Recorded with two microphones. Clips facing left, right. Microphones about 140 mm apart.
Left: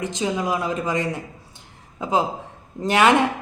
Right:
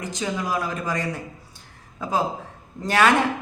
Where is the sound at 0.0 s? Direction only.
20° left (ahead or behind).